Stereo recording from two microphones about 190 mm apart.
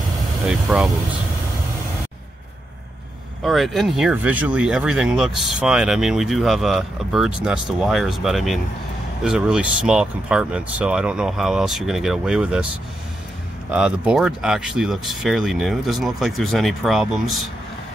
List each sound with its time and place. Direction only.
0.5 s speech: 5° right (ahead or behind)
3.4 s speech: centre (ahead or behind)
13.7 s speech: 5° right (ahead or behind)